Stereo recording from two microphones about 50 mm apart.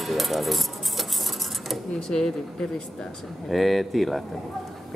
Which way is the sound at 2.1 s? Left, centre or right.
Centre.